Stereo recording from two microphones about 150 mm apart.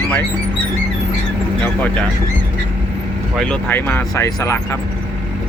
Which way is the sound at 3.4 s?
10° left (ahead or behind).